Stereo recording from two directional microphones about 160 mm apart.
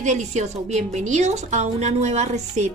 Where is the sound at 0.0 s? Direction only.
45° right (ahead or behind).